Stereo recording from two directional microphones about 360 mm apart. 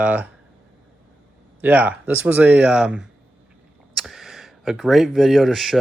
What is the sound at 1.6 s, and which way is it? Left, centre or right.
Speech, centre.